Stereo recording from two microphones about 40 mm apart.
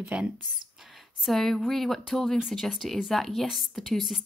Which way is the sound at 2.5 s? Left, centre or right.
Centre.